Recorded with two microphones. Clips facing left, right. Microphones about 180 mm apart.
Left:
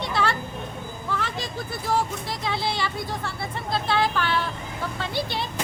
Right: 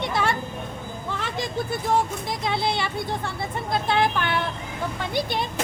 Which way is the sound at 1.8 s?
20° right (ahead or behind).